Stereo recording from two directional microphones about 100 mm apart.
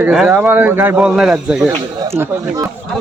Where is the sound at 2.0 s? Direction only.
25° right (ahead or behind).